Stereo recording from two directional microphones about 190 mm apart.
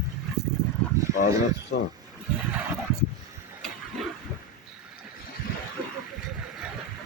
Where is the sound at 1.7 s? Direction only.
60° left (ahead or behind).